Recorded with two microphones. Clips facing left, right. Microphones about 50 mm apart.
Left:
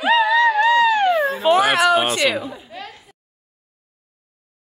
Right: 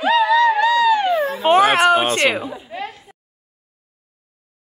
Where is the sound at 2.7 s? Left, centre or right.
Right.